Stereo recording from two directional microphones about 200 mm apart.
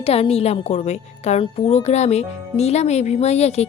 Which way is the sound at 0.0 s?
30° left (ahead or behind).